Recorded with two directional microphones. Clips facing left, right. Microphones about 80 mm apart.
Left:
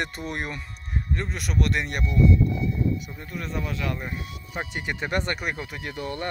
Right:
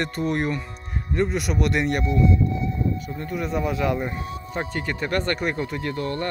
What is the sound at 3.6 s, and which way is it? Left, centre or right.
Speech, centre.